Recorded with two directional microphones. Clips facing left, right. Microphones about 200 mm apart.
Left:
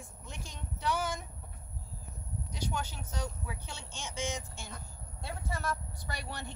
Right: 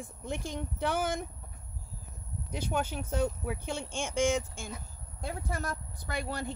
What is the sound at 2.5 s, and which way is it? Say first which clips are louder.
Speech: right 6 dB; 55° right (ahead or behind).